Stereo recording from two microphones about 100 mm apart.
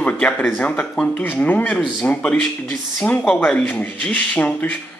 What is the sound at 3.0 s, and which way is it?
A man's voice, 15° left (ahead or behind).